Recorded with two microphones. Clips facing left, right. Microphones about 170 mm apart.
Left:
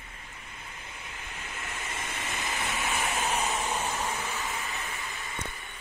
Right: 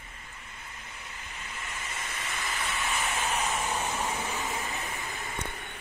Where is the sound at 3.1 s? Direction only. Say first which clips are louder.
Left 1 dB; 10° left (ahead or behind).